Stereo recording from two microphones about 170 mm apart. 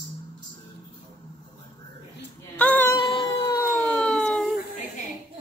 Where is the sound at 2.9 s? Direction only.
30° left (ahead or behind).